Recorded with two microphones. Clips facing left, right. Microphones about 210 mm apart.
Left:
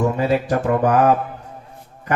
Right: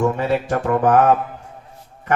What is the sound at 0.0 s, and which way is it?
A man's voice, 40° left (ahead or behind).